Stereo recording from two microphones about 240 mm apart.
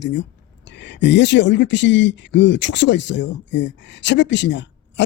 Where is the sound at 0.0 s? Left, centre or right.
Left.